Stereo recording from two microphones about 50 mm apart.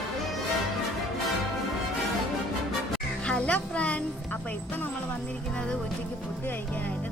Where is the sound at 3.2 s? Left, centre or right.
Left.